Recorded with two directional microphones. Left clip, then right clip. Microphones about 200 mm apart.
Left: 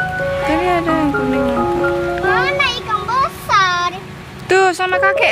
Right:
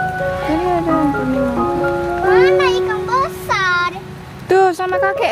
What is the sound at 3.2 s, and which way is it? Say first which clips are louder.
Music: left 3 dB; 20° right (ahead or behind).